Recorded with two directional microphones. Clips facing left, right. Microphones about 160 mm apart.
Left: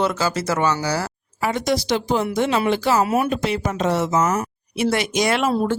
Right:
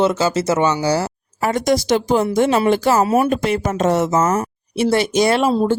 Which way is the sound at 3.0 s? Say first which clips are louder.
Right 4 dB; 30° right (ahead or behind).